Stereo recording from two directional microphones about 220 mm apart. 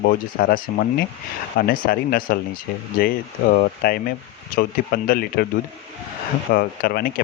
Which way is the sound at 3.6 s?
45° left (ahead or behind).